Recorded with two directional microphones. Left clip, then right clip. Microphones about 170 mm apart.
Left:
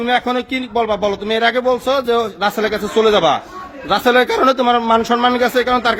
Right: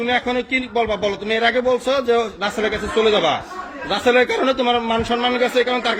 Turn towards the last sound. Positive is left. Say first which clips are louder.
# left 3 dB
turn(degrees=35)  # may be behind; listen again after turning